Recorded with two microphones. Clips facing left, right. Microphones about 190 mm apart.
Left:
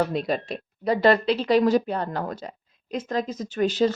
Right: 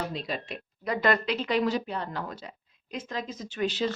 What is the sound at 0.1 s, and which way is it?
Speech, 50° left (ahead or behind).